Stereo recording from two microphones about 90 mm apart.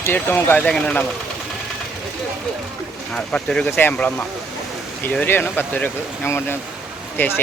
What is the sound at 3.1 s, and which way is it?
Speech, 10° left (ahead or behind).